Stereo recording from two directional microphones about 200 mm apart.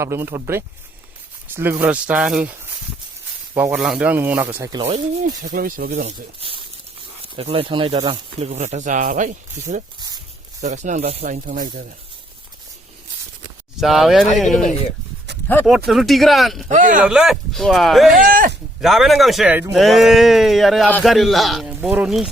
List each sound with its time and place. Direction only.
0.0 s speech: 15° right (ahead or behind)
4.8 s speech: 35° right (ahead or behind)
5.4 s speech: 45° right (ahead or behind)
7.2 s speech: 30° right (ahead or behind); by 11.9 s 45° right (ahead or behind)
13.7 s speech: centre (ahead or behind)
15.9 s speech: centre (ahead or behind)
16.6 s speech: 40° right (ahead or behind)
17.0 s speech: 5° right (ahead or behind)
18.2 s speech: 45° right (ahead or behind)
18.8 s speech: centre (ahead or behind)